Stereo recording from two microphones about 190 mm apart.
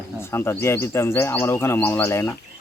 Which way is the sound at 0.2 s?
15° left (ahead or behind).